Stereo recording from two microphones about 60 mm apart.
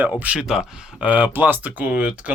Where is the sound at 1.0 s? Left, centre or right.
Right.